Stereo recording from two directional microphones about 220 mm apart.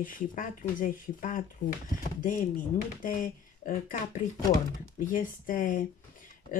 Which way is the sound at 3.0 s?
40° left (ahead or behind).